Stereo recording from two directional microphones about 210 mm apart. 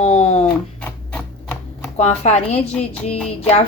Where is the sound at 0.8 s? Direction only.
5° left (ahead or behind).